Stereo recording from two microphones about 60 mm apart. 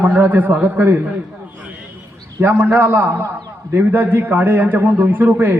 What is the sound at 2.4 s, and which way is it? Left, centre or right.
A man's voice, right.